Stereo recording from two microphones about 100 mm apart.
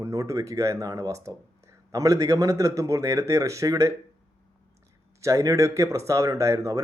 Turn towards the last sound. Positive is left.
turn(degrees=-30)  # may be behind; listen again after turning